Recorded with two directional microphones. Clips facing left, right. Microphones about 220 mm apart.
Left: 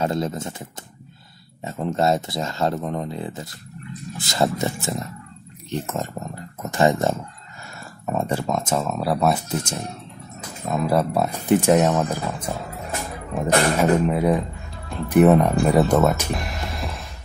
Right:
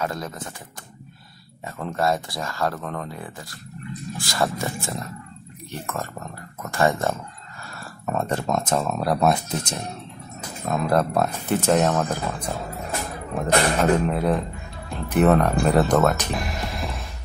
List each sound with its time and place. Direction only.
0.0 s speech: 25° left (ahead or behind); by 17.1 s centre (ahead or behind)